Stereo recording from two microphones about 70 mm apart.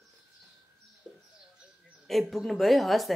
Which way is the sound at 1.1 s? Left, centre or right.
Centre.